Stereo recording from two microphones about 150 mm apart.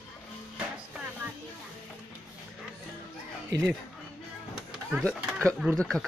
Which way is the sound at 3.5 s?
90° right.